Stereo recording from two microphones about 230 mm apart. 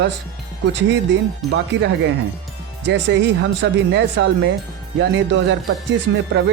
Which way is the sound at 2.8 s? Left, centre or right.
Right.